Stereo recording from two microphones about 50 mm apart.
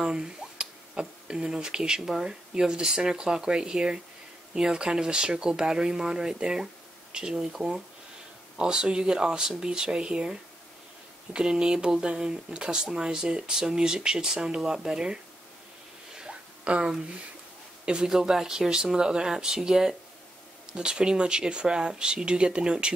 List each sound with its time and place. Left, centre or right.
0.0 s speech: centre
11.3 s speech: centre
16.2 s a sound: right
17.8 s speech: centre